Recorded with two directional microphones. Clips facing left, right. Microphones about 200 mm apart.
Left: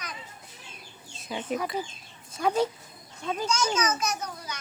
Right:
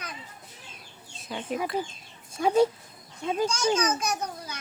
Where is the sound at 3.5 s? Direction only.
30° right (ahead or behind).